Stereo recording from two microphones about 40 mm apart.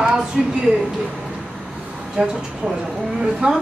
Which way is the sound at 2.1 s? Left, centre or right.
Right.